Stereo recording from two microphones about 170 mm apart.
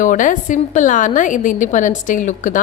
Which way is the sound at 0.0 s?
50° left (ahead or behind).